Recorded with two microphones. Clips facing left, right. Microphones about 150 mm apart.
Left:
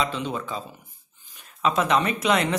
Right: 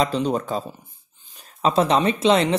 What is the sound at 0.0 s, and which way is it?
Speech, 40° right (ahead or behind).